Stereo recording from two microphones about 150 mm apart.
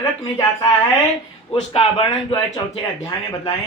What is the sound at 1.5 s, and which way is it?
Speech, 35° left (ahead or behind).